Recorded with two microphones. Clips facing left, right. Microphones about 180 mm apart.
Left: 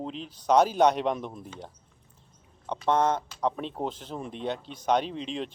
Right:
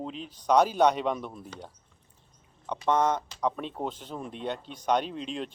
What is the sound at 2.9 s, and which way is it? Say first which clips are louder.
Speech: left 1 dB; 10° right (ahead or behind).